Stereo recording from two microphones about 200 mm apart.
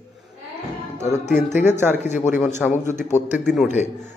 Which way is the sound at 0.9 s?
35° left (ahead or behind).